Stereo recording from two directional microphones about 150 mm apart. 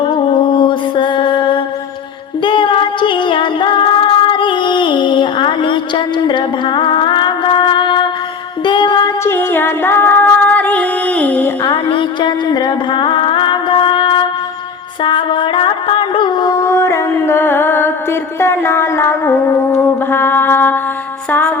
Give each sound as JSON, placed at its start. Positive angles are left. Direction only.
{"t": 0.3, "sound": "mantra", "side_deg": 35}
{"t": 2.4, "sound": "music", "side_deg": 35}
{"t": 9.2, "sound": "music", "side_deg": 15}
{"t": 11.6, "sound": "a sound", "side_deg": 30}
{"t": 15.0, "sound": "music", "side_deg": 30}
{"t": 16.6, "sound": "music", "side_deg": 20}